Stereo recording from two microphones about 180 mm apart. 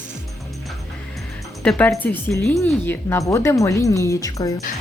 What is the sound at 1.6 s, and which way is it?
Speech, 5° left (ahead or behind).